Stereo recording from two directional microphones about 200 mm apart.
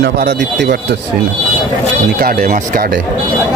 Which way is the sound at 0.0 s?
55° right (ahead or behind).